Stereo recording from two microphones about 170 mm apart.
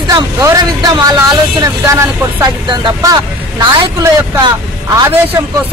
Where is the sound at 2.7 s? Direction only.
25° right (ahead or behind).